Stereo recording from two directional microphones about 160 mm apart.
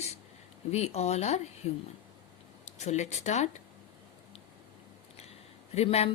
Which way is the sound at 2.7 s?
45° left (ahead or behind).